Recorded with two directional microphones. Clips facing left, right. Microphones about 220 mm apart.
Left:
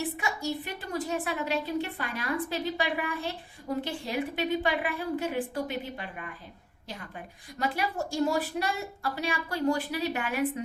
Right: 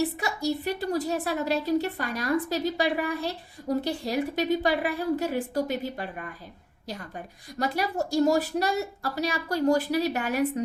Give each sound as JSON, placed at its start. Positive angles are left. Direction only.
{"t": 0.2, "sound": "a woman's voice", "side_deg": -35}
{"t": 7.6, "sound": "a woman's voice", "side_deg": -40}